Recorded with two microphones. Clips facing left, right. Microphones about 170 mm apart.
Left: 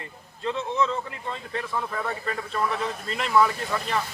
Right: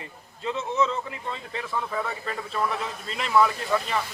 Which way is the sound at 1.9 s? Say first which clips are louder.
Even; centre (ahead or behind).